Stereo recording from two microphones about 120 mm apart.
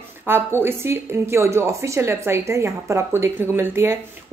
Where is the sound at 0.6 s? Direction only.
20° right (ahead or behind).